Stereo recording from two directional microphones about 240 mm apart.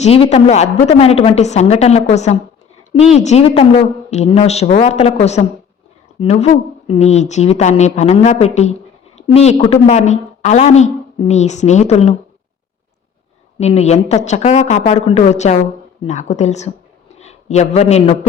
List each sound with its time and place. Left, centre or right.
0.0 s a woman's voice: left
13.6 s a man's voice: left